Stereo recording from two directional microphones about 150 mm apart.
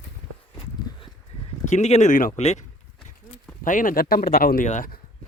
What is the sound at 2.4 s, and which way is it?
Speech, 45° left (ahead or behind).